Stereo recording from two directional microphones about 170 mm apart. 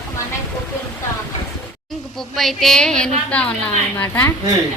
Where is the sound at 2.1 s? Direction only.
Centre (ahead or behind).